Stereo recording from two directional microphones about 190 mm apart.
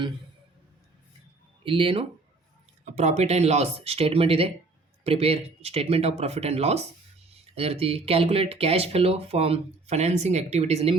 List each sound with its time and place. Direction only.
1.6 s speech: 25° right (ahead or behind)
2.8 s speech: 40° right (ahead or behind)